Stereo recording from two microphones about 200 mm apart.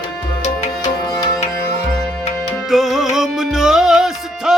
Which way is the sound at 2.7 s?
Centre (ahead or behind).